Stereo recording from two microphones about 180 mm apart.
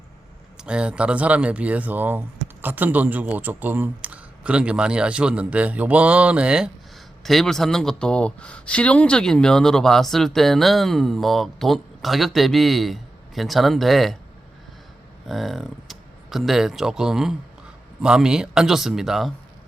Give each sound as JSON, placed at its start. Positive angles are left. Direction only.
{"t": 0.5, "sound": "speech", "side_deg": -5}
{"t": 15.3, "sound": "speech", "side_deg": 0}